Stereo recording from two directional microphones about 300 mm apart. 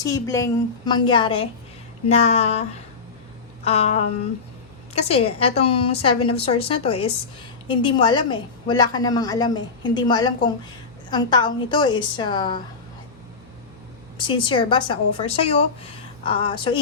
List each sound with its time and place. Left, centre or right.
0.0 s a woman's voice: centre
14.2 s a woman's voice: centre